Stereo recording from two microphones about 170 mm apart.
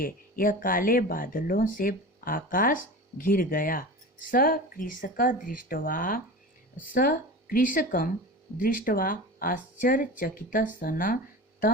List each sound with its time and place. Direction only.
0.0 s speech: 55° left (ahead or behind)